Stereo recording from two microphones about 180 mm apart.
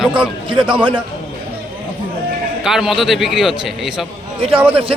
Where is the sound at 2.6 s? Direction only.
Centre (ahead or behind).